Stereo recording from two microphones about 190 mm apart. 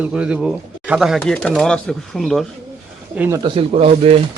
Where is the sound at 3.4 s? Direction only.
25° right (ahead or behind).